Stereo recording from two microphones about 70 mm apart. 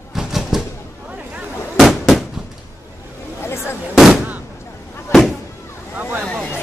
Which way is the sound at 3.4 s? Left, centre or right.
Left.